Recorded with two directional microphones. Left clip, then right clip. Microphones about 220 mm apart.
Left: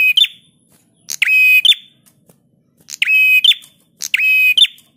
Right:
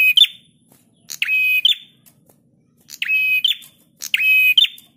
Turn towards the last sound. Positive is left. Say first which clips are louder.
# left 2 dB
turn(degrees=15)  # may be behind; listen again after turning